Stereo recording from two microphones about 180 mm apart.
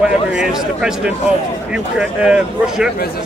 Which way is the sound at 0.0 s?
5° right (ahead or behind).